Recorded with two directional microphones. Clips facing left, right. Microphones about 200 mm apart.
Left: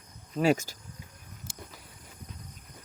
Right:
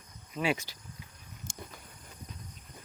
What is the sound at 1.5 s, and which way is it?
Cricket, 5° left (ahead or behind).